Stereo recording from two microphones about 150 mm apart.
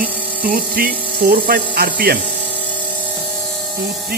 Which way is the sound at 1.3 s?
85° right.